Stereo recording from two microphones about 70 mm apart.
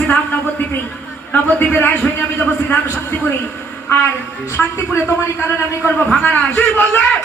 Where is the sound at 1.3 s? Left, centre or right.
Left.